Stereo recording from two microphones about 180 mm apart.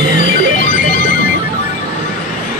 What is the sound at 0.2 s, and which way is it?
Music, 50° left (ahead or behind).